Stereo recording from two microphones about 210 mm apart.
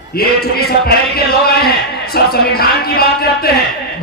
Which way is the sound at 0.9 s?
45° left (ahead or behind).